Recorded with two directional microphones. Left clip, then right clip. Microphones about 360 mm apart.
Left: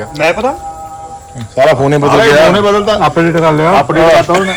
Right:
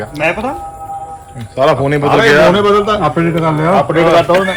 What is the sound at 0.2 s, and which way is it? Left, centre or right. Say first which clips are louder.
Speech: left 4 dB; left.